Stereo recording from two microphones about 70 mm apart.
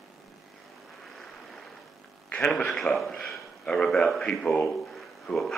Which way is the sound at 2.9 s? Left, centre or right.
Centre.